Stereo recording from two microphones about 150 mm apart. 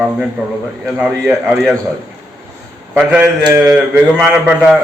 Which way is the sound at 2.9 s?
10° right (ahead or behind).